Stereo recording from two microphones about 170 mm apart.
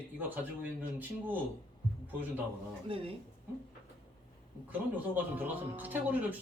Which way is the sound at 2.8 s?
35° right (ahead or behind).